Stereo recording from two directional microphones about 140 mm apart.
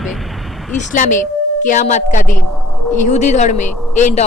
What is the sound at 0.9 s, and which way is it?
A woman's voice, 65° left (ahead or behind).